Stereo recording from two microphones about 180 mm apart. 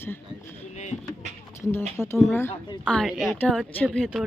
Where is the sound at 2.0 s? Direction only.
15° left (ahead or behind).